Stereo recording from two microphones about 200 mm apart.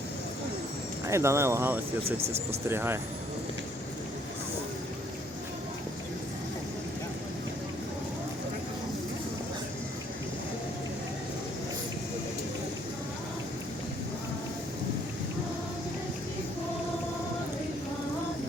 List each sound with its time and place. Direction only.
1.0 s speech: 15° right (ahead or behind)
2.0 s speech: 30° right (ahead or behind)
2.6 s speech: 10° right (ahead or behind)